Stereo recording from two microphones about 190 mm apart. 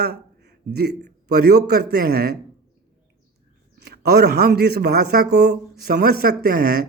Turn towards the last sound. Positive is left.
turn(degrees=-55)  # may be behind; listen again after turning